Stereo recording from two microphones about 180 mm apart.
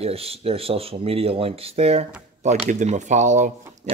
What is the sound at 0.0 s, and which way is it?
Speech, 35° right (ahead or behind).